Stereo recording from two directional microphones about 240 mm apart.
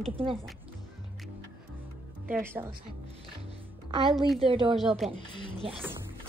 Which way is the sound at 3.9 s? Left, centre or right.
Centre.